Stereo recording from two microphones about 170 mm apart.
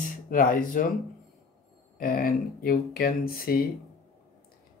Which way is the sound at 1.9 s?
60° left (ahead or behind).